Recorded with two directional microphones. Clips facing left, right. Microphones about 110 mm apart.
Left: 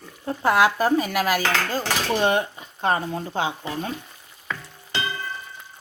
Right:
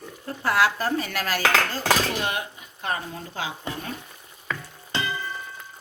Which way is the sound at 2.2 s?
30° left (ahead or behind).